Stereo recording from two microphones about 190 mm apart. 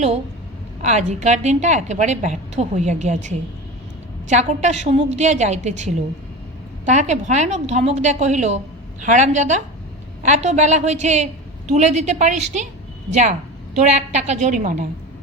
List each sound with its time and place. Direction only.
0.8 s a woman's voice: 35° right (ahead or behind)
13.7 s a woman's voice: 40° right (ahead or behind)